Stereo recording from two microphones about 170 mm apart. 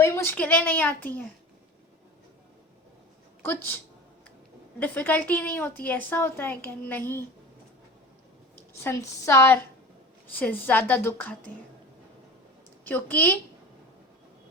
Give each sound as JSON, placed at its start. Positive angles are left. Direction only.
{"t": 0.0, "sound": "a woman's voice", "side_deg": 15}
{"t": 3.4, "sound": "a woman's voice", "side_deg": 10}
{"t": 4.8, "sound": "a woman's voice", "side_deg": 10}
{"t": 8.5, "sound": "a sound", "side_deg": 15}
{"t": 9.2, "sound": "a woman's voice", "side_deg": 15}
{"t": 12.9, "sound": "a woman's voice", "side_deg": 10}